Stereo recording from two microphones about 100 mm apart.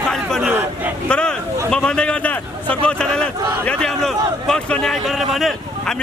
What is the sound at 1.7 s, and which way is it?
A man's voice, 10° left (ahead or behind).